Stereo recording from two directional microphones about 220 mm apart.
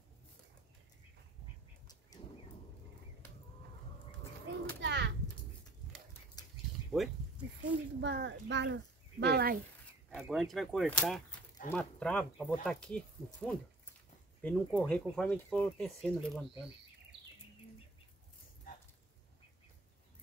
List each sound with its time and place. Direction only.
4.7 s children playing: 50° right (ahead or behind)
6.9 s a sound: centre (ahead or behind)
7.7 s speech: 5° right (ahead or behind)
8.0 s speech: 50° right (ahead or behind)
10.1 s speech: centre (ahead or behind)